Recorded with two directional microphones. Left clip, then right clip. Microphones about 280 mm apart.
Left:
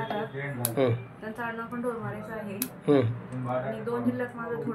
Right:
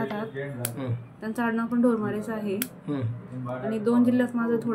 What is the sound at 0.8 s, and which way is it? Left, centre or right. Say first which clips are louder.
Speech: left 13 dB; centre.